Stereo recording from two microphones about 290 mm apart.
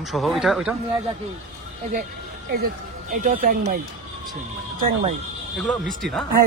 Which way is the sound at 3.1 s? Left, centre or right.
Right.